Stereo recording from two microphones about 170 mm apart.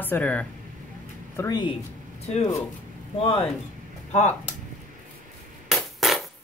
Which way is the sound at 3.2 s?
35° left (ahead or behind).